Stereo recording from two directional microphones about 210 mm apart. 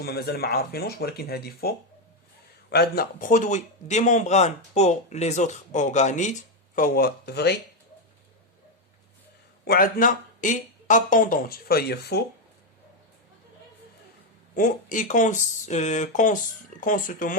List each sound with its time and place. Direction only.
0.0 s speech: 50° left (ahead or behind)
9.6 s speech: 45° left (ahead or behind)
14.5 s speech: 40° left (ahead or behind)